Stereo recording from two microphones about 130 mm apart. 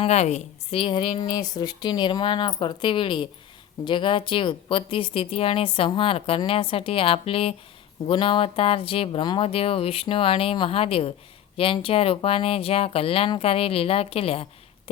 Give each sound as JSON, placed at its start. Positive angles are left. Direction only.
{"t": 0.0, "sound": "a woman's voice", "side_deg": 55}